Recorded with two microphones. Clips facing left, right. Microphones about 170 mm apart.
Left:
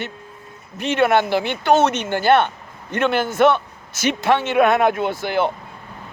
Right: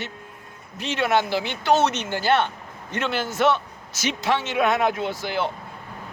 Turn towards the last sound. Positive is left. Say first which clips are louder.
# left 5 dB
turn(degrees=55)  # may be behind; listen again after turning